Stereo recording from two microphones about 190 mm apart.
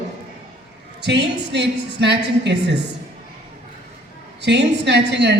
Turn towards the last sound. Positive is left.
turn(degrees=-65)  # may be behind; listen again after turning